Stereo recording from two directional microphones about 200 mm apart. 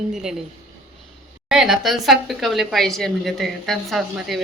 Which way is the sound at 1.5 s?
Centre (ahead or behind).